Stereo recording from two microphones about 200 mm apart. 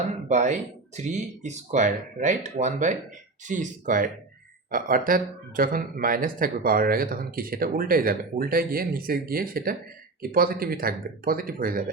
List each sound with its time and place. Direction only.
0.3 s speech: 35° right (ahead or behind)